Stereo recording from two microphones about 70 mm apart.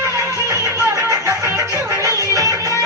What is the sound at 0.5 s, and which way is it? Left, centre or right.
Music, right.